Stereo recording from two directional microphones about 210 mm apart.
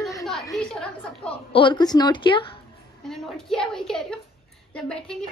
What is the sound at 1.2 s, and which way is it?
A woman's voice, 25° left (ahead or behind).